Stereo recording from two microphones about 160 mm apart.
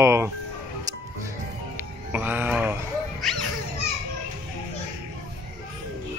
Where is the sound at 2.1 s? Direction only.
10° right (ahead or behind).